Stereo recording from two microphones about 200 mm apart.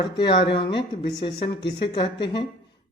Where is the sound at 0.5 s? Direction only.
25° left (ahead or behind).